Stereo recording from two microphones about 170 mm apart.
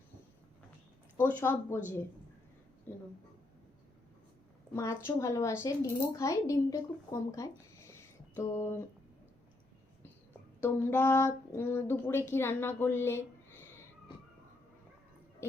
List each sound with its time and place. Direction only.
1.1 s speech: 15° left (ahead or behind)
4.7 s speech: 15° left (ahead or behind)
10.6 s speech: 10° left (ahead or behind)